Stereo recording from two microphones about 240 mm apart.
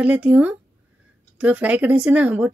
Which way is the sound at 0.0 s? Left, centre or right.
Centre.